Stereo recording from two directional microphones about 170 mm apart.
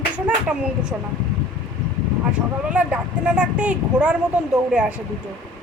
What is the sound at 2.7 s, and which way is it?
Speech, 10° right (ahead or behind).